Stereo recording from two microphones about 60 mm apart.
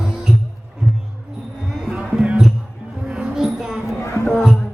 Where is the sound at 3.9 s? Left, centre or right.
Left.